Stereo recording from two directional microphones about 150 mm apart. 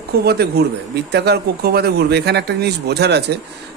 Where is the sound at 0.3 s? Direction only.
90° right.